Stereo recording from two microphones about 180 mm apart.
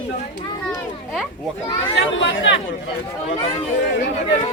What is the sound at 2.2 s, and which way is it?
Speech, 90° left.